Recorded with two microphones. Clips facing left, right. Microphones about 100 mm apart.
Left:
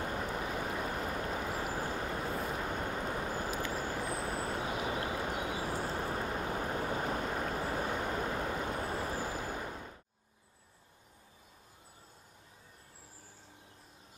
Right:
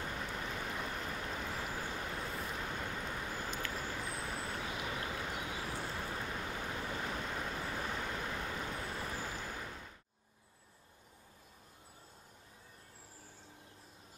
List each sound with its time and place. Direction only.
0.0 s vehicle: 40° left (ahead or behind)
1.7 s vehicle: 30° left (ahead or behind); by 5.7 s 50° left (ahead or behind)
5.7 s vehicle: 35° left (ahead or behind)